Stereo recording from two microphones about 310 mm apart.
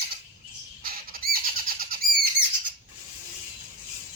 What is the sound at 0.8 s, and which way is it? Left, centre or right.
Bird, right.